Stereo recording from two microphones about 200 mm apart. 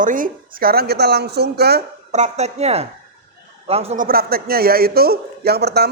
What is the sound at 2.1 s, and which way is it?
A man's voice, 35° right (ahead or behind).